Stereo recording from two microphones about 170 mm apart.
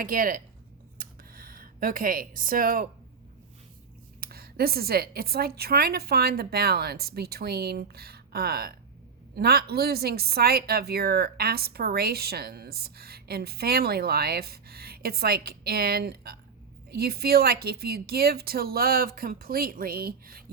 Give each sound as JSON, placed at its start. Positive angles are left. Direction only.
{"t": 0.0, "sound": "a woman's voice", "side_deg": -55}
{"t": 0.9, "sound": "a sound", "side_deg": -55}
{"t": 4.2, "sound": "a woman's voice", "side_deg": -65}